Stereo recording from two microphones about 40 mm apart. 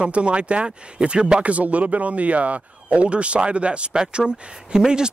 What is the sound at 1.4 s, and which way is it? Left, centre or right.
Speech, right.